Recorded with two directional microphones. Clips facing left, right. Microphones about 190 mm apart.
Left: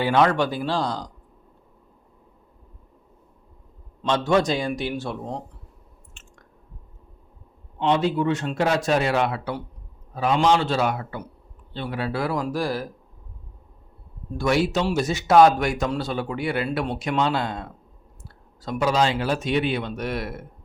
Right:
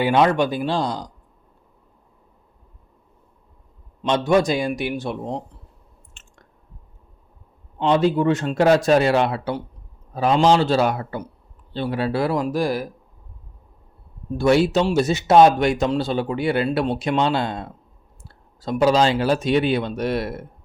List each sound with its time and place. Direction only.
0.0 s a man's voice: 20° right (ahead or behind)
4.0 s a man's voice: 20° right (ahead or behind)
7.8 s a man's voice: 40° right (ahead or behind); by 12.9 s 15° right (ahead or behind)
14.3 s a man's voice: 25° right (ahead or behind)